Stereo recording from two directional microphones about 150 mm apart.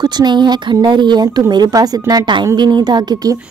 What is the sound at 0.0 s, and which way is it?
A woman's voice, 30° right (ahead or behind).